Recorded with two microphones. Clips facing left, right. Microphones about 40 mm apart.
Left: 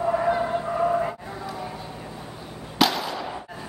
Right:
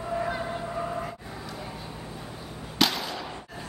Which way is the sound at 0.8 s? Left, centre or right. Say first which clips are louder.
Left 9 dB; left.